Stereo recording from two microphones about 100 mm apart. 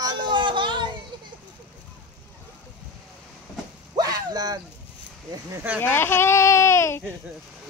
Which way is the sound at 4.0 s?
40° right (ahead or behind).